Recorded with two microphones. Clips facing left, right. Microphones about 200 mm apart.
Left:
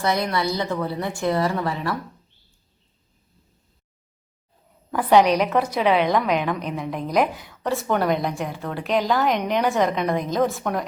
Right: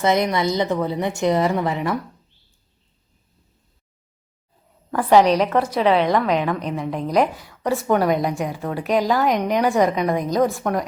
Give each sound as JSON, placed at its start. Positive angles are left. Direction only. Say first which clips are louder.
{"t": 0.0, "sound": "a woman's voice", "louder": "right 4 dB", "side_deg": -20}
{"t": 4.9, "sound": "a woman's voice", "louder": "right 2 dB", "side_deg": 0}